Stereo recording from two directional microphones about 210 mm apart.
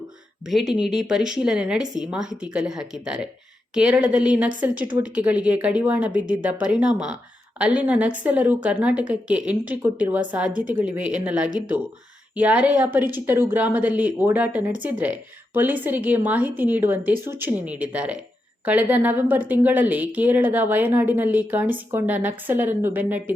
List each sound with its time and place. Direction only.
0.4 s a woman's voice: centre (ahead or behind)
11.4 s speech: 40° right (ahead or behind)
12.4 s a woman's voice: 5° right (ahead or behind)